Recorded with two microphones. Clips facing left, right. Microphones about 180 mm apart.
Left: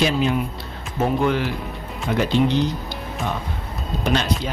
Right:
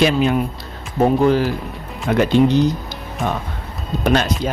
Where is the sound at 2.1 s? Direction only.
50° right (ahead or behind).